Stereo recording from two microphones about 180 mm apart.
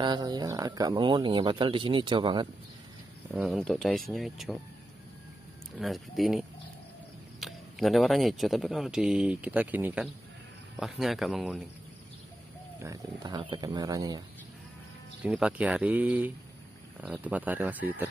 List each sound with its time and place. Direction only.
0.0 s speech: 25° right (ahead or behind)
3.3 s speech: centre (ahead or behind)
5.8 s speech: centre (ahead or behind)
12.8 s speech: 20° right (ahead or behind)
15.2 s speech: 5° right (ahead or behind)